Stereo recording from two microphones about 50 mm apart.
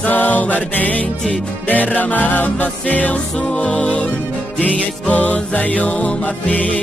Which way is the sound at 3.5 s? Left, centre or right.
Left.